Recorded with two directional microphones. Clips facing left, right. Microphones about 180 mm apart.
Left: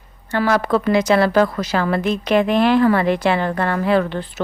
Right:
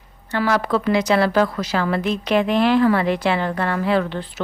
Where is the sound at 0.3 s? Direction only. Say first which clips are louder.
Left 2 dB; 50° left (ahead or behind).